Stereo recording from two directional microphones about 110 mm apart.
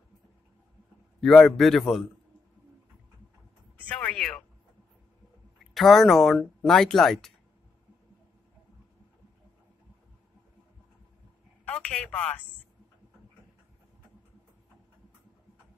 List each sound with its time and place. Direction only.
1.2 s speech: 5° left (ahead or behind)
3.9 s a sound: 10° left (ahead or behind)
5.8 s speech: centre (ahead or behind)
11.6 s telephone: 10° left (ahead or behind)